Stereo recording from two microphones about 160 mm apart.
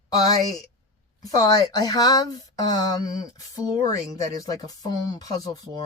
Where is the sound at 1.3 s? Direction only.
25° left (ahead or behind).